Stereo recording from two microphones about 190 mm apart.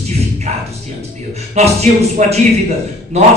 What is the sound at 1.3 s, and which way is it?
Speech, 35° right (ahead or behind).